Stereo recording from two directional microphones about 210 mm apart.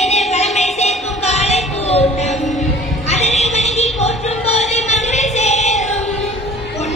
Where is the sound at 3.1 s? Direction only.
30° left (ahead or behind).